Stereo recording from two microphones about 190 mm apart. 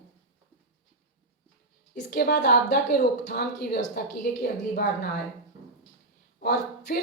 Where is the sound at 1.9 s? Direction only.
50° left (ahead or behind).